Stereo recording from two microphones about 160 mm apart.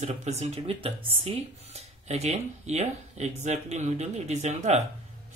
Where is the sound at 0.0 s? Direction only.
45° right (ahead or behind).